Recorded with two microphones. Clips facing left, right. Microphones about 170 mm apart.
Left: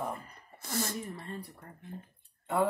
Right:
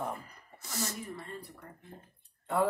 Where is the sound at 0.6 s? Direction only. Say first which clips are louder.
Left 3 dB; 55° left (ahead or behind).